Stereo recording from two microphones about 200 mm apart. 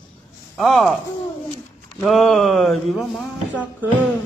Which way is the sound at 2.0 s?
Centre (ahead or behind).